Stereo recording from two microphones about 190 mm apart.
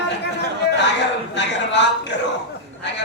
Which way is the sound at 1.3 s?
70° left (ahead or behind).